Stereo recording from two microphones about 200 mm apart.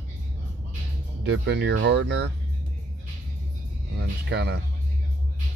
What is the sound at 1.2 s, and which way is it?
Speech, 60° right (ahead or behind).